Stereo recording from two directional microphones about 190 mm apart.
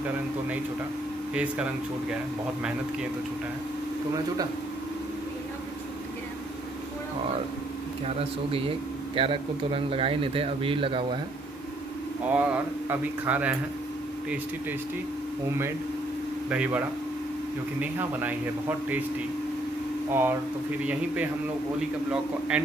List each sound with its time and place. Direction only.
1.3 s speech: 5° right (ahead or behind)
8.2 s speech: 30° right (ahead or behind)
12.3 s speech: 10° right (ahead or behind)
16.4 s speech: 5° right (ahead or behind)
20.1 s speech: 10° right (ahead or behind)